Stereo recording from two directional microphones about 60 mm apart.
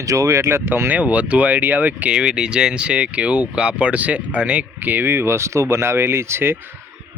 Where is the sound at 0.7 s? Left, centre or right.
Right.